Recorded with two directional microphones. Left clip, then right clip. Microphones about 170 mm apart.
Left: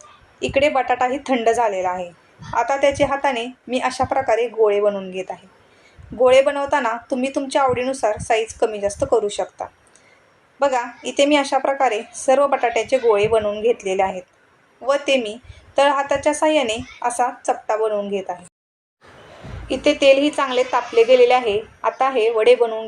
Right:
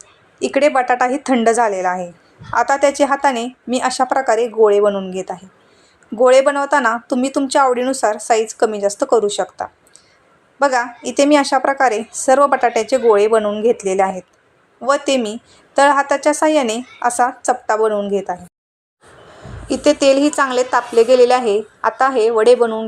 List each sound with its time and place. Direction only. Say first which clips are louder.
0.3 s a woman's voice: right 3 dB; 40° right (ahead or behind)
19.6 s speech: right 1 dB; 45° right (ahead or behind)